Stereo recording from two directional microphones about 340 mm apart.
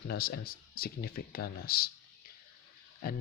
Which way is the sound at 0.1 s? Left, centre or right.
Left.